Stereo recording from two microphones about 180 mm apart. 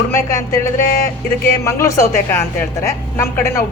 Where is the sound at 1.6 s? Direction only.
15° left (ahead or behind).